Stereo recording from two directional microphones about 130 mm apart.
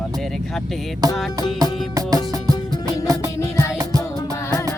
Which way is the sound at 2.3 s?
25° right (ahead or behind).